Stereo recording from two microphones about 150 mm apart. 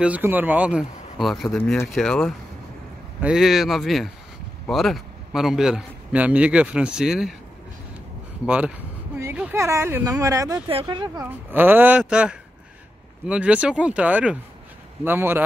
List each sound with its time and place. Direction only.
0.0 s speech: 10° right (ahead or behind)
1.6 s speech: 15° left (ahead or behind)
1.9 s a man's voice: centre (ahead or behind)
8.5 s speech: 10° right (ahead or behind)
10.7 s speech: 35° right (ahead or behind)
11.5 s speech: 15° right (ahead or behind)